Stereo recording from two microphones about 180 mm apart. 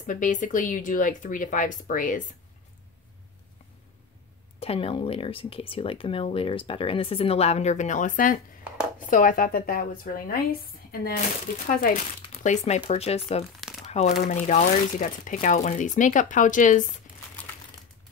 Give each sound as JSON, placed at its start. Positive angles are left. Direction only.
{"t": 0.0, "sound": "speech", "side_deg": 45}
{"t": 4.6, "sound": "speech", "side_deg": 35}
{"t": 11.1, "sound": "speech", "side_deg": 40}
{"t": 12.3, "sound": "speech", "side_deg": 40}
{"t": 13.6, "sound": "crumpling", "side_deg": 0}
{"t": 14.3, "sound": "speech", "side_deg": 40}